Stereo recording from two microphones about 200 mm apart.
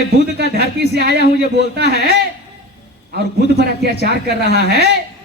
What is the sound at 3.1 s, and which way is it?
A man's voice, 55° right (ahead or behind).